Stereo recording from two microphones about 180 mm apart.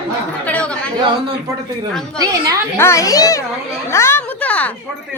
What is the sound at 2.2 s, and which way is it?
Speech, 20° right (ahead or behind).